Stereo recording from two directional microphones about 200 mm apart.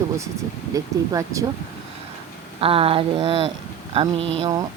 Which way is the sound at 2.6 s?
30° right (ahead or behind).